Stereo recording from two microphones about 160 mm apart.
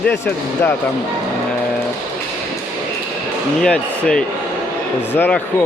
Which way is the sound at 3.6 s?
5° left (ahead or behind).